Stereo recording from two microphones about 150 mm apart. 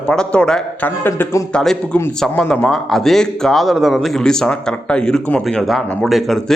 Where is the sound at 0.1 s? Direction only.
5° left (ahead or behind).